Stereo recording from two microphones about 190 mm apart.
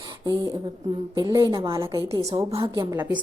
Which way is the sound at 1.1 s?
20° right (ahead or behind).